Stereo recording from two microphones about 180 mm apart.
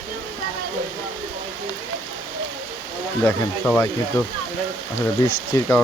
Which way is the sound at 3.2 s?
10° left (ahead or behind).